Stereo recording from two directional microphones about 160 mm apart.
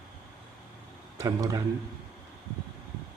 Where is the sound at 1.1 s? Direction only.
20° right (ahead or behind).